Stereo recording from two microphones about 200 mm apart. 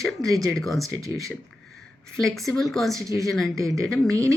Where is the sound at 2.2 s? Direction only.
Centre (ahead or behind).